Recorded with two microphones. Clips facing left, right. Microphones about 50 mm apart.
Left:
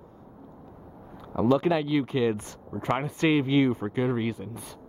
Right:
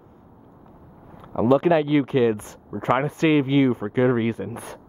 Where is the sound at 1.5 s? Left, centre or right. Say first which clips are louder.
Right 6 dB; right.